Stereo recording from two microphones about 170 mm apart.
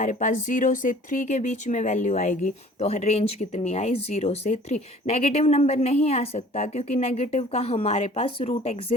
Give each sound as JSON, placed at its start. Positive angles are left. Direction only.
{"t": 0.0, "sound": "speech", "side_deg": 50}